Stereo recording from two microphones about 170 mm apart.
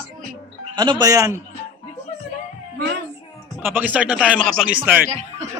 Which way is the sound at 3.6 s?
10° right (ahead or behind).